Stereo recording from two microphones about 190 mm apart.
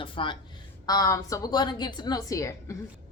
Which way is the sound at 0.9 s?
20° left (ahead or behind).